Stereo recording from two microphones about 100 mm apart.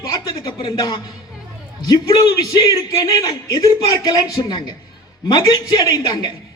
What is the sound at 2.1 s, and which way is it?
A man's voice, 50° left (ahead or behind).